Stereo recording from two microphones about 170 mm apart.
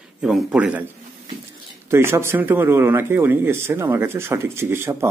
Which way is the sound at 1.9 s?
15° right (ahead or behind).